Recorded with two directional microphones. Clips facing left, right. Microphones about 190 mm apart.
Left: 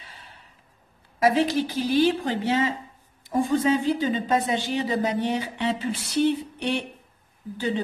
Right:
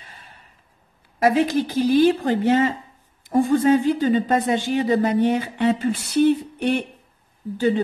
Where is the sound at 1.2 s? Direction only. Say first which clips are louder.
Right 3 dB; 50° right (ahead or behind).